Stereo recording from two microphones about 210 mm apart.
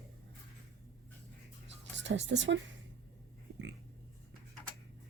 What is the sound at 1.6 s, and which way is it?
Music, 60° right (ahead or behind).